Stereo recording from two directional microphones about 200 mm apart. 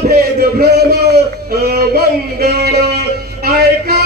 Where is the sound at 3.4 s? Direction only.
50° right (ahead or behind).